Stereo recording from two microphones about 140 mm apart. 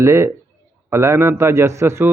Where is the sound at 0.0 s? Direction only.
20° right (ahead or behind).